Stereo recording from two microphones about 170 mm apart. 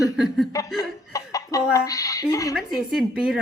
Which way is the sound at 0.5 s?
20° left (ahead or behind).